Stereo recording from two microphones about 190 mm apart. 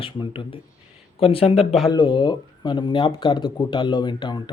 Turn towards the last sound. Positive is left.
turn(degrees=20)  # may be behind; listen again after turning